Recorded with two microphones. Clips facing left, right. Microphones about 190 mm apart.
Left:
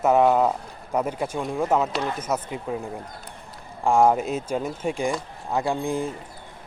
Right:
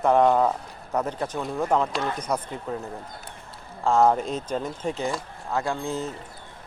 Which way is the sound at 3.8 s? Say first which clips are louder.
Left 1 dB; 10° left (ahead or behind).